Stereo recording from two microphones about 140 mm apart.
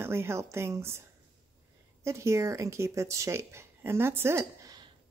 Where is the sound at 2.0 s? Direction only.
20° right (ahead or behind).